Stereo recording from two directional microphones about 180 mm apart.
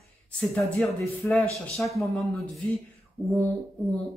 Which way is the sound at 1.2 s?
10° left (ahead or behind).